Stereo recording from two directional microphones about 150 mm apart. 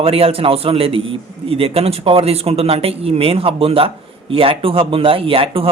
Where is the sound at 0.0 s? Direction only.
40° right (ahead or behind).